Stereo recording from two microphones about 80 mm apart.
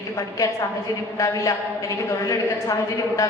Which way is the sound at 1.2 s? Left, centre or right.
Left.